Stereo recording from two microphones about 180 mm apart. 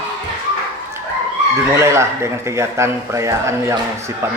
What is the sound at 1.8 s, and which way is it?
A man's voice, 15° right (ahead or behind).